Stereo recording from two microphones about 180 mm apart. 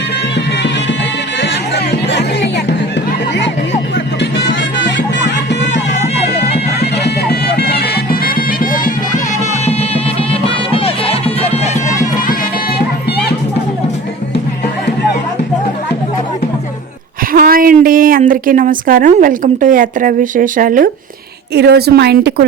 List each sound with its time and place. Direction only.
1.4 s music: 75° left (ahead or behind)
4.2 s music: 80° left
7.0 s music: 60° left (ahead or behind)
10.7 s music: 30° left (ahead or behind)
17.3 s a woman's voice: 55° right (ahead or behind)
21.5 s a woman's voice: 65° right (ahead or behind)